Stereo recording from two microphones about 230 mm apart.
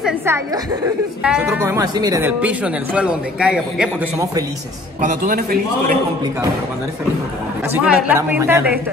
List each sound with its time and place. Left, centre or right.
0.0 s a woman's voice: centre
5.0 s a man's voice: right
7.7 s speech: centre